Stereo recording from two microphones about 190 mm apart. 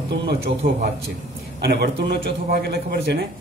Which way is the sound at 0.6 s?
50° right (ahead or behind).